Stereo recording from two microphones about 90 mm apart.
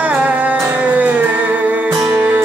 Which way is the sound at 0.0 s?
15° right (ahead or behind).